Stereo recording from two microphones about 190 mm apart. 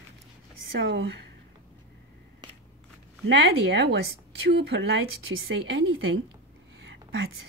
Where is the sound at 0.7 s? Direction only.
70° right (ahead or behind).